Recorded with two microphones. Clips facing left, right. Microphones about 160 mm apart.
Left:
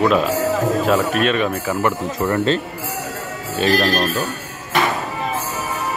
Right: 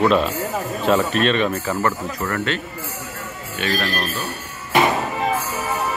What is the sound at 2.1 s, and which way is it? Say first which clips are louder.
Speech: left 6 dB; 25° left (ahead or behind).